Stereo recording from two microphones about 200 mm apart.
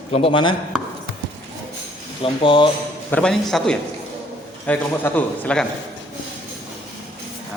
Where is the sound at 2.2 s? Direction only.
25° left (ahead or behind).